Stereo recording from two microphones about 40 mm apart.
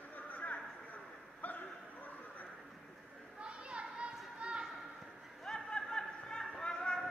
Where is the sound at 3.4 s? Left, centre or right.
Right.